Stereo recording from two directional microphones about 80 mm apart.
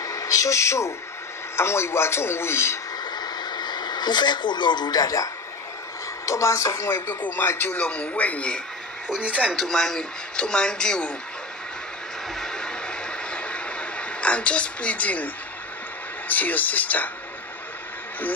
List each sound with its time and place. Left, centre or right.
0.0 s a man's voice: left
3.2 s radio: left
6.2 s a man's voice: left
7.1 s speech: left
9.6 s speech: centre
12.4 s vehicle: centre
16.3 s speech: left